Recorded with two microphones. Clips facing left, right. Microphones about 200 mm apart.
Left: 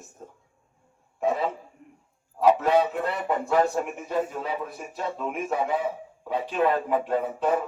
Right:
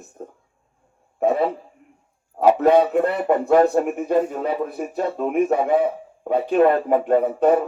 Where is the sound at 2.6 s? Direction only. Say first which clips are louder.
Right 7 dB; 35° right (ahead or behind).